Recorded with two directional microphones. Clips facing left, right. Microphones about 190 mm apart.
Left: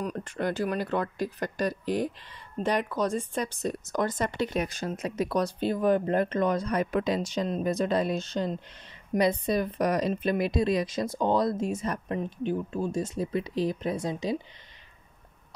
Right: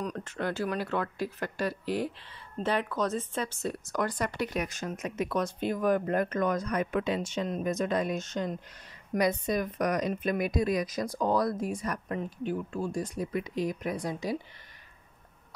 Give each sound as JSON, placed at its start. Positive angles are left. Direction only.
{"t": 0.0, "sound": "speech", "side_deg": 10}